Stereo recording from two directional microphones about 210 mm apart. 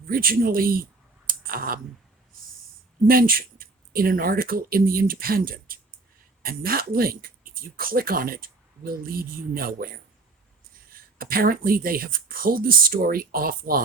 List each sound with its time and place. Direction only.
0.1 s speech: 45° right (ahead or behind)
3.1 s speech: 45° right (ahead or behind)
11.2 s speech: 45° right (ahead or behind)